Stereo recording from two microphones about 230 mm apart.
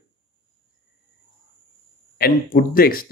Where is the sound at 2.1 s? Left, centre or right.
Left.